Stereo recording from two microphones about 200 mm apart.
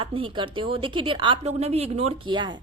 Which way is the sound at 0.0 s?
25° right (ahead or behind).